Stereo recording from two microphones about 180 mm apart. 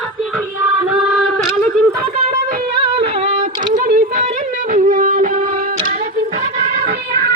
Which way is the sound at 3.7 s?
50° right (ahead or behind).